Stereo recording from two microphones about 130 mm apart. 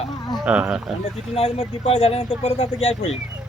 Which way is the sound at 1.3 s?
50° left (ahead or behind).